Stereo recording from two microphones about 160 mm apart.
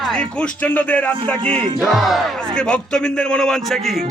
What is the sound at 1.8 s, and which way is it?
Speech, centre (ahead or behind).